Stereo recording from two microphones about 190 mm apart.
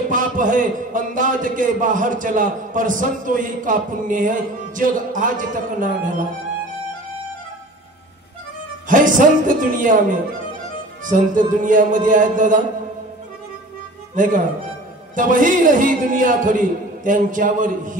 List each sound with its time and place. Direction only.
0.1 s a man's voice: 45° right (ahead or behind)
8.8 s a man's voice: 45° right (ahead or behind)
11.1 s a man's voice: 45° right (ahead or behind)
14.1 s a man's voice: 45° right (ahead or behind)